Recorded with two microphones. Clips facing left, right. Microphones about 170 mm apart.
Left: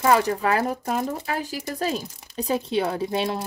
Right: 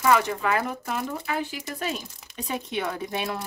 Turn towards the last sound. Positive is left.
turn(degrees=30)  # may be behind; listen again after turning